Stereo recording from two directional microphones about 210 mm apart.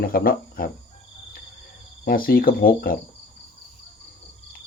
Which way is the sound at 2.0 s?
45° left (ahead or behind).